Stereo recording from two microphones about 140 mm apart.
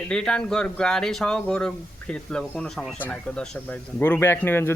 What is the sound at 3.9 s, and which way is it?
Speech, 15° left (ahead or behind).